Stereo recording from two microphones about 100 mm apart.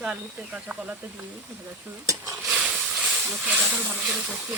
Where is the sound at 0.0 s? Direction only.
10° right (ahead or behind).